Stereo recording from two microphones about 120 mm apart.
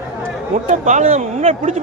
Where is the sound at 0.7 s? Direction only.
85° right; by 1.8 s 65° right (ahead or behind).